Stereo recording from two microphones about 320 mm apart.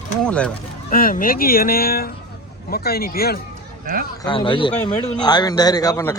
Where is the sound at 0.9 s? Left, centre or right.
Left.